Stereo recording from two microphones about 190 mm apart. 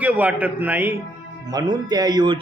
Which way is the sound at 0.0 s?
10° right (ahead or behind).